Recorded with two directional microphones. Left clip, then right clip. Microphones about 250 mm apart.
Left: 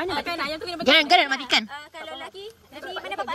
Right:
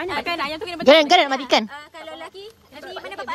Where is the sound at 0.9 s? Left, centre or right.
Centre.